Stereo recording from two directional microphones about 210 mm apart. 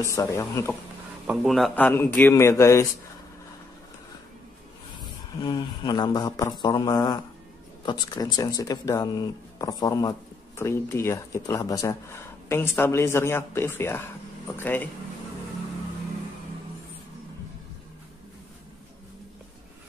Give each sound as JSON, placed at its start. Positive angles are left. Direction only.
{"t": 0.0, "sound": "speech", "side_deg": 15}
{"t": 1.2, "sound": "speech", "side_deg": 0}
{"t": 5.4, "sound": "a man's voice", "side_deg": 20}